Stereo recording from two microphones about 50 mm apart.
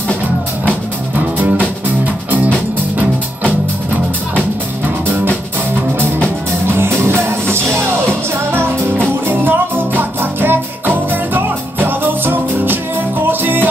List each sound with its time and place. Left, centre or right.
7.1 s music: right